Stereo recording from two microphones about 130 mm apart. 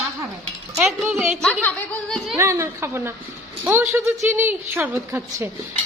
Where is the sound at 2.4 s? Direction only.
20° right (ahead or behind).